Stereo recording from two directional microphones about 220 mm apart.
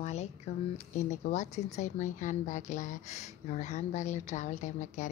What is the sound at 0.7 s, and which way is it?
Speech, 30° left (ahead or behind).